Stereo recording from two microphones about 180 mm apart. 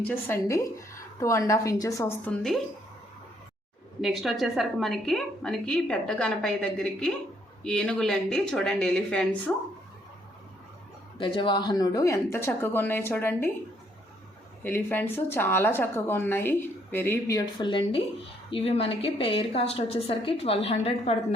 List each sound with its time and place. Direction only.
0.0 s speech: 10° left (ahead or behind)
4.0 s a woman's voice: centre (ahead or behind)
11.2 s speech: 25° left (ahead or behind)
14.6 s speech: 10° left (ahead or behind)
17.6 s a woman's voice: 25° left (ahead or behind)